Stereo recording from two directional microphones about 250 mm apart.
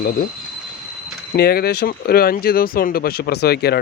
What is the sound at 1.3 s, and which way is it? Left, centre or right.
Speech, left.